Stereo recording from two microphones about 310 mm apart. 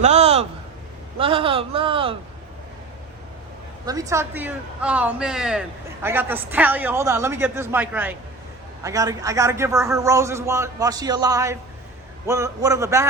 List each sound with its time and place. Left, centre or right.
0.0 s a sound: right
1.2 s a man's voice: centre
3.8 s a man's voice: centre